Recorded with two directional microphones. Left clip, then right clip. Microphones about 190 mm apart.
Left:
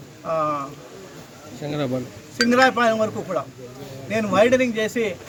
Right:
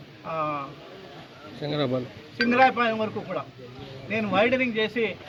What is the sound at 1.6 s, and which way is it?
Speech, 35° right (ahead or behind).